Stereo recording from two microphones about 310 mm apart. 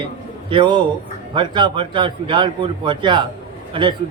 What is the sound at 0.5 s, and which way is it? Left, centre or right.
Speech, centre.